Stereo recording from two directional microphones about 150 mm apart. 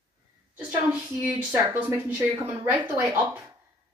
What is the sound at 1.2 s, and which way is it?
Speech, 10° right (ahead or behind).